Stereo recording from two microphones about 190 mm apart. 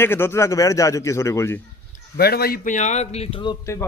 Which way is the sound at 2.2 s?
55° left (ahead or behind).